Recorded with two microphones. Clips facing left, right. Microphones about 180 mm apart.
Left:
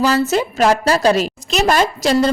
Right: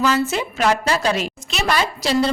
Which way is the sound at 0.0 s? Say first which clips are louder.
Left 4 dB; 40° left (ahead or behind).